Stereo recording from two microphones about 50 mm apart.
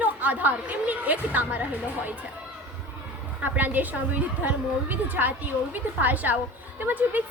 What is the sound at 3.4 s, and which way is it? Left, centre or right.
A woman's voice, right.